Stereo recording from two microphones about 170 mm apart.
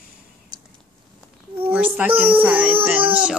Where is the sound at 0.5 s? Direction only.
25° right (ahead or behind).